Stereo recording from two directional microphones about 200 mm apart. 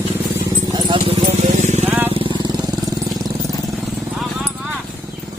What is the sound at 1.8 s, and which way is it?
Vehicle, 10° right (ahead or behind).